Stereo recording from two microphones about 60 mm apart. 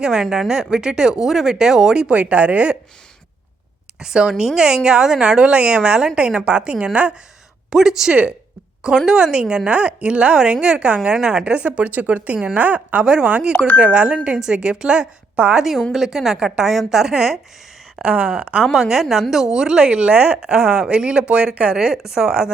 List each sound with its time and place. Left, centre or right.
0.0 s a woman's voice: centre
4.0 s a woman's voice: centre
7.7 s a woman's voice: centre
11.4 s speech: right
13.5 s speech: left
13.7 s a woman's voice: centre
15.9 s a woman's voice: centre
18.6 s a woman's voice: centre